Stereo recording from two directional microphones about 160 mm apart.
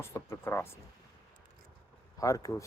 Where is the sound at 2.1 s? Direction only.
20° left (ahead or behind).